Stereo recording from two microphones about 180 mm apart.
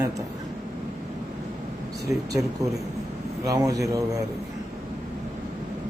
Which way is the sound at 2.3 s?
20° right (ahead or behind).